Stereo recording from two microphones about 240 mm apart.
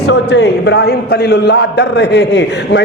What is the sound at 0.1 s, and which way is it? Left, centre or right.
A man's voice, left.